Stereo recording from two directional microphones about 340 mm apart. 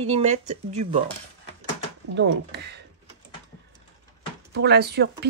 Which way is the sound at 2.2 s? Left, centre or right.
Right.